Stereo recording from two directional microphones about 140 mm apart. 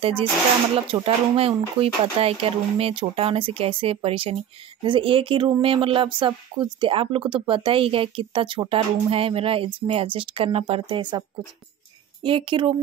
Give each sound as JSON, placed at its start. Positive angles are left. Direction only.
{"t": 0.0, "sound": "speech", "side_deg": -40}